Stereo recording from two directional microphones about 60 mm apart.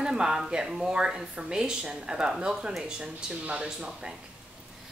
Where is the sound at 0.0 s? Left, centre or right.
Centre.